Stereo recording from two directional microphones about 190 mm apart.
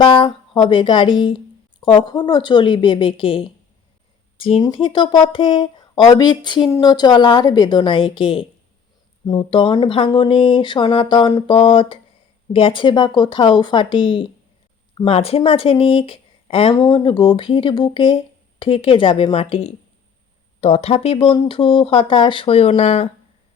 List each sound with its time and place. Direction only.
0.0 s speech: 30° left (ahead or behind)